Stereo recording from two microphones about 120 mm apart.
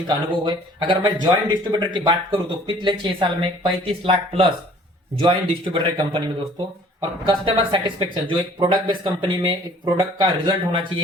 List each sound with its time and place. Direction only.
0.1 s speech: 40° right (ahead or behind)
7.3 s speech: 45° right (ahead or behind)